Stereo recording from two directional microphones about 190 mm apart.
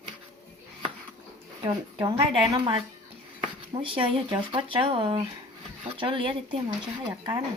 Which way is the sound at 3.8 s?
25° right (ahead or behind).